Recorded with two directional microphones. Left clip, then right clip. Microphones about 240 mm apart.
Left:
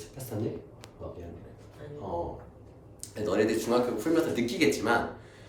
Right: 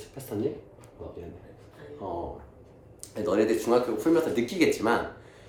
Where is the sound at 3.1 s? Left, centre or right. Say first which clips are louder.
Right 2 dB; right.